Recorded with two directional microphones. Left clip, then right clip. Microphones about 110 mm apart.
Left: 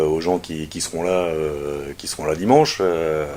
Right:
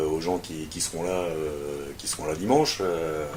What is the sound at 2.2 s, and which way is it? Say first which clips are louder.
Speech: left 8 dB; 15° left (ahead or behind).